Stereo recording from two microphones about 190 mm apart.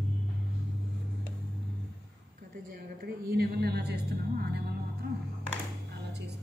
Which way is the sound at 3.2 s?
55° right (ahead or behind).